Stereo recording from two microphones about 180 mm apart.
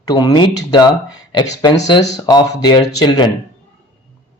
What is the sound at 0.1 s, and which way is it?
Speech, 25° left (ahead or behind).